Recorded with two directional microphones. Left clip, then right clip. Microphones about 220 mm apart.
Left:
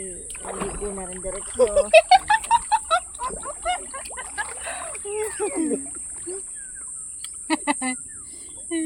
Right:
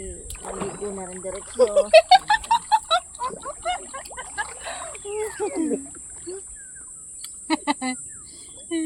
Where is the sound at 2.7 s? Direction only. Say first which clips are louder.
Right 1 dB; 15° right (ahead or behind).